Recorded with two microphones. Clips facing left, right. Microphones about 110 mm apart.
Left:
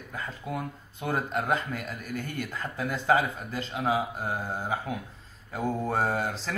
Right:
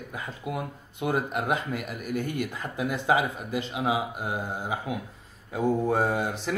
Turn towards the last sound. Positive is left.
turn(degrees=-15)  # may be behind; listen again after turning